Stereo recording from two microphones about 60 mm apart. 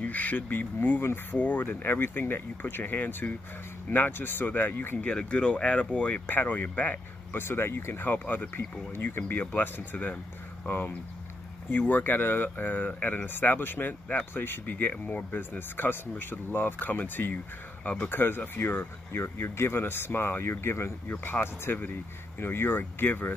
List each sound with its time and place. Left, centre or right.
0.0 s speech: left
4.9 s speech: centre; by 23.3 s left